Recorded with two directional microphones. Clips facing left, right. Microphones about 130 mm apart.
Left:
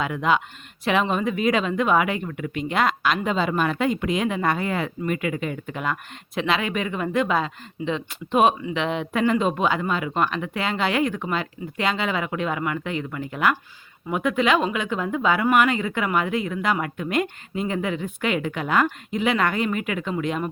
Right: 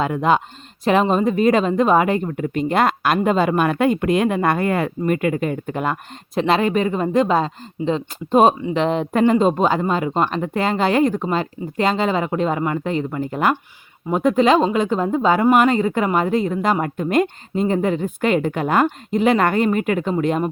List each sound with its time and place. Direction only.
0.0 s speech: 40° right (ahead or behind)